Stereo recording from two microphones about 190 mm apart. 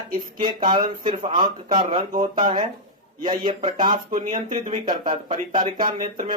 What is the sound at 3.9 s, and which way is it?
Speech, 45° right (ahead or behind).